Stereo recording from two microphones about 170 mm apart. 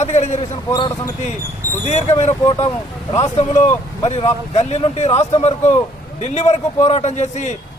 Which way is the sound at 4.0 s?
30° left (ahead or behind).